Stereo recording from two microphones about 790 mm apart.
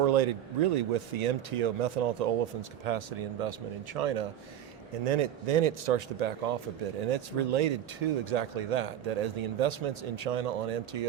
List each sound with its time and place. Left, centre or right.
0.0 s a man's voice: right